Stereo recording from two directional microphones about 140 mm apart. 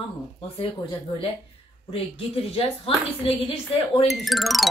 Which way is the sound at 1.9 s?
45° left (ahead or behind).